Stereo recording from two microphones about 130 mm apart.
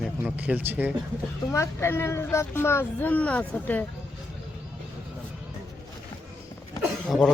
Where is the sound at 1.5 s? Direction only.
20° left (ahead or behind).